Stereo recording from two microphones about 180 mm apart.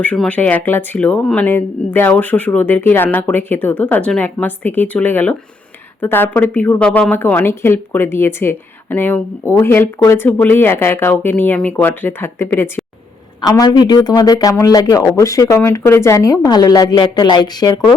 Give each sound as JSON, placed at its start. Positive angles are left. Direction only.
{"t": 0.0, "sound": "a woman's voice", "side_deg": 10}
{"t": 13.4, "sound": "speech", "side_deg": 25}